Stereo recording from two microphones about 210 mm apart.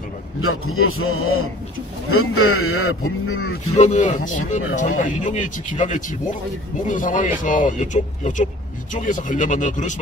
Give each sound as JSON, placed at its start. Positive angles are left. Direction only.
{"t": 0.4, "sound": "a man's voice", "side_deg": 90}
{"t": 3.7, "sound": "speech", "side_deg": 35}